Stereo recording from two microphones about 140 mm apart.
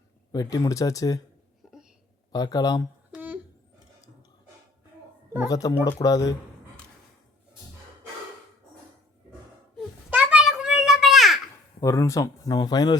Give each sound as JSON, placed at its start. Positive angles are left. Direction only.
{"t": 0.3, "sound": "speech", "side_deg": 25}
{"t": 1.6, "sound": "a sound", "side_deg": 0}
{"t": 2.3, "sound": "speech", "side_deg": 25}
{"t": 3.1, "sound": "humming", "side_deg": -10}
{"t": 5.5, "sound": "speech", "side_deg": 25}
{"t": 10.1, "sound": "a sound", "side_deg": -10}
{"t": 11.8, "sound": "speech", "side_deg": 20}